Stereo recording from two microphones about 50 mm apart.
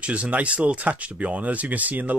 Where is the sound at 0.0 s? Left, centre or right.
Right.